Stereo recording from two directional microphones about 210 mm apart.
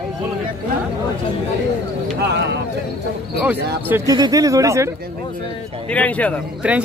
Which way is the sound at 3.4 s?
15° right (ahead or behind).